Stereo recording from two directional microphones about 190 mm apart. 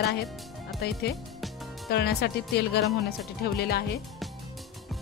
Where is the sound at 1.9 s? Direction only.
55° left (ahead or behind).